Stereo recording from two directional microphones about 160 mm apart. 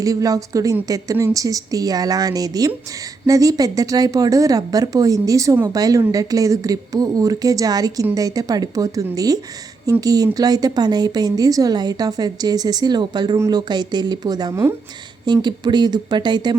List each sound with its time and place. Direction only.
0.0 s a woman's voice: 20° right (ahead or behind)